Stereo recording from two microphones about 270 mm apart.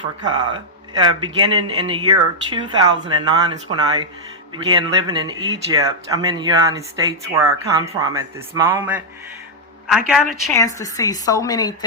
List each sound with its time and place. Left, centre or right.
0.2 s a man's voice: centre
10.5 s a woman's voice: centre